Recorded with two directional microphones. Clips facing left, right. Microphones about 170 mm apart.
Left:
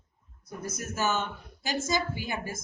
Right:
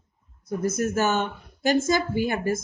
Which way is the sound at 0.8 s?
55° right (ahead or behind).